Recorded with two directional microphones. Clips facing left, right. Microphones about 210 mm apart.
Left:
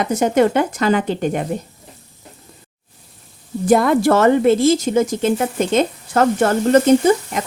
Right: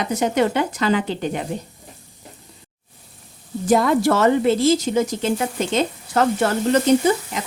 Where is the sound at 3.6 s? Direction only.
55° left (ahead or behind).